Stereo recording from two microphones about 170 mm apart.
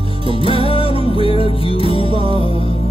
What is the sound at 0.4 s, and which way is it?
Music, 35° left (ahead or behind).